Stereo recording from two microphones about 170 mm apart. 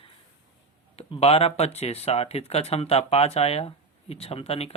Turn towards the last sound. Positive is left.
turn(degrees=35)  # may be behind; listen again after turning